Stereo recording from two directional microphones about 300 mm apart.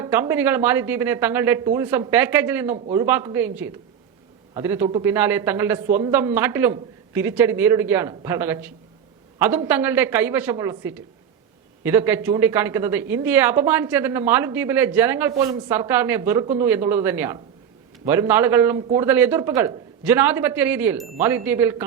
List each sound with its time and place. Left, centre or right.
0.0 s a man's voice: centre